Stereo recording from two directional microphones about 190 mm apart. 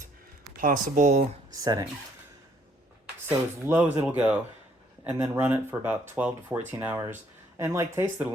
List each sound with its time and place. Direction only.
0.6 s speech: 45° right (ahead or behind)
3.2 s speech: 10° right (ahead or behind)